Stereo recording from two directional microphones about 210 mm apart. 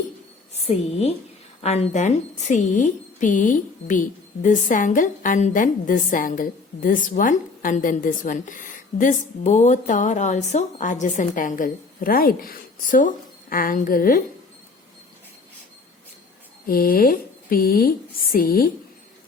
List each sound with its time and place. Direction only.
0.7 s a woman's voice: 30° left (ahead or behind)
16.6 s speech: 45° left (ahead or behind)